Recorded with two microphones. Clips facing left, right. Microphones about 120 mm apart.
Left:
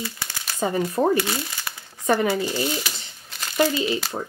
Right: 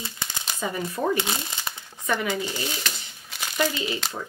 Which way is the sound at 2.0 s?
35° left (ahead or behind).